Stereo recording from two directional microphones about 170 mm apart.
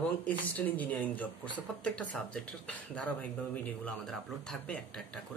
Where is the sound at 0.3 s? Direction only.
10° left (ahead or behind).